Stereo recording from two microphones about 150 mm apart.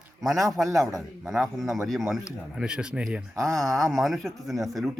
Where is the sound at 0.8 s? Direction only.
20° right (ahead or behind).